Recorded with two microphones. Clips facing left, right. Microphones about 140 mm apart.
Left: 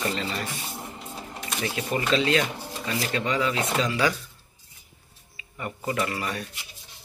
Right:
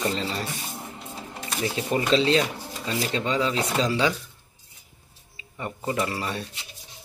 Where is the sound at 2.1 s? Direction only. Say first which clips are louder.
Right 2 dB; 30° right (ahead or behind).